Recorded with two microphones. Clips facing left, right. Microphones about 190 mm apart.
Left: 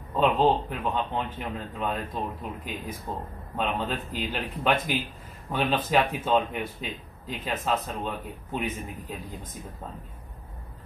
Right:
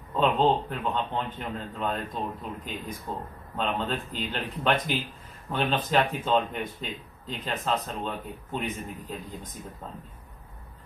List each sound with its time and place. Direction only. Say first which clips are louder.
0.1 s speech: left 1 dB; 5° left (ahead or behind)